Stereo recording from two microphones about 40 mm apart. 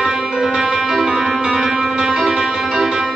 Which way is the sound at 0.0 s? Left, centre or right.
Centre.